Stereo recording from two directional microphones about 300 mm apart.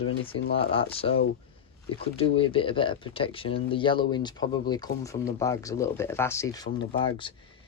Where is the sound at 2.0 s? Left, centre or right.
Centre.